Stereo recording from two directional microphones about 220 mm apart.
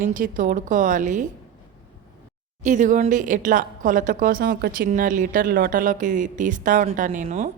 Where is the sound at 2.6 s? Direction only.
35° right (ahead or behind).